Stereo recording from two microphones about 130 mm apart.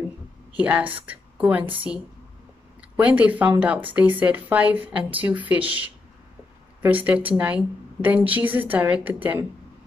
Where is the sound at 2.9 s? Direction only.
10° right (ahead or behind).